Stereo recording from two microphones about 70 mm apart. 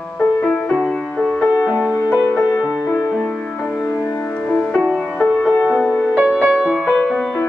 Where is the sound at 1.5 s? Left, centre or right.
Centre.